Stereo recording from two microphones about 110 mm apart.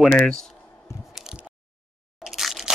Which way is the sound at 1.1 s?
10° right (ahead or behind).